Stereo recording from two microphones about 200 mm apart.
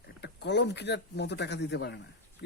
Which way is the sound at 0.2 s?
60° left (ahead or behind).